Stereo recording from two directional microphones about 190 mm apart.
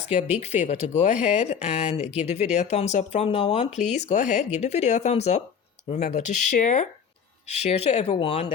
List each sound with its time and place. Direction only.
0.1 s speech: 35° left (ahead or behind)